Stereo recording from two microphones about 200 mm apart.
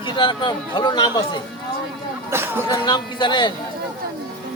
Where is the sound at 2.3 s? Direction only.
10° right (ahead or behind).